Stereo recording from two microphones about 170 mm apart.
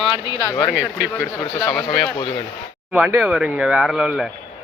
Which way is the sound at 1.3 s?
15° left (ahead or behind).